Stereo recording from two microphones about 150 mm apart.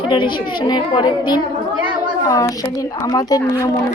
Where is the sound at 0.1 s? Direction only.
30° left (ahead or behind).